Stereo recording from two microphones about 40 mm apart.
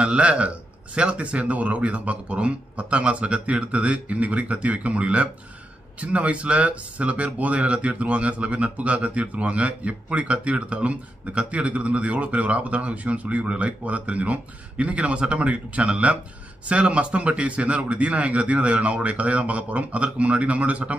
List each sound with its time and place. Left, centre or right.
0.0 s speech: right